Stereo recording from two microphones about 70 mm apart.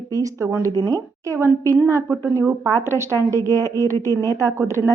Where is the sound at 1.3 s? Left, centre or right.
Right.